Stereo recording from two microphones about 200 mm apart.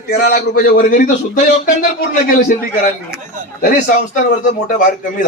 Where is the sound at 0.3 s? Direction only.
45° left (ahead or behind).